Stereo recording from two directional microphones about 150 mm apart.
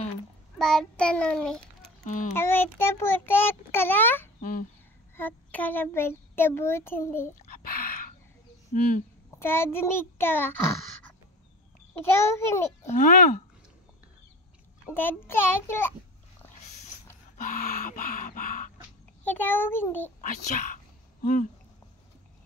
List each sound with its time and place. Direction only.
0.6 s child singing: 5° left (ahead or behind)
2.3 s a child's voice: 15° left (ahead or behind)
4.4 s speech: 65° left (ahead or behind)
5.1 s a child's voice: 10° left (ahead or behind)
7.4 s a sound: 65° left (ahead or behind)
9.3 s a child's voice: 15° left (ahead or behind)
12.0 s a child's voice: 15° left (ahead or behind)
12.8 s speech: 60° left (ahead or behind)
15.0 s a child's voice: 15° left (ahead or behind)
17.4 s a sound: 65° left (ahead or behind)
19.2 s a child's voice: 15° left (ahead or behind)
20.2 s a sound: 60° left (ahead or behind)